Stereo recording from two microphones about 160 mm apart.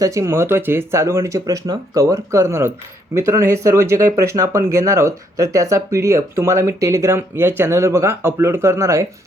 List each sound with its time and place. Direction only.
0.0 s speech: 20° right (ahead or behind)